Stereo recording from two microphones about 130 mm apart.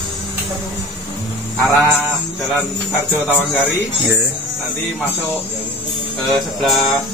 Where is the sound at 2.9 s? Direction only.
Centre (ahead or behind).